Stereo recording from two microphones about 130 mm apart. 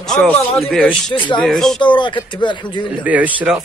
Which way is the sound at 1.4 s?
5° left (ahead or behind).